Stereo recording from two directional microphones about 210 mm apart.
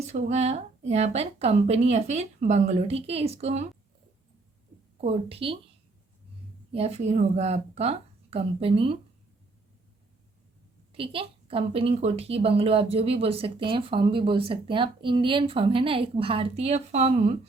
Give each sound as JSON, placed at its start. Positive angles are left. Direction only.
{"t": 0.1, "sound": "a woman's voice", "side_deg": -30}
{"t": 4.9, "sound": "a woman's voice", "side_deg": -30}
{"t": 6.7, "sound": "a woman's voice", "side_deg": -30}
{"t": 10.9, "sound": "a woman's voice", "side_deg": -25}